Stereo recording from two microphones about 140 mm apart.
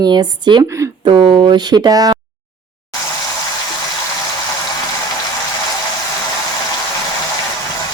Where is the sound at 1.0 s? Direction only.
40° right (ahead or behind).